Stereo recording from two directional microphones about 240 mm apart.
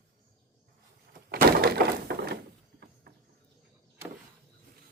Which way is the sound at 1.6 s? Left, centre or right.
Right.